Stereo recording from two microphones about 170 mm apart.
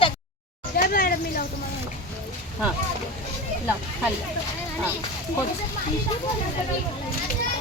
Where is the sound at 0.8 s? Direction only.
60° left (ahead or behind).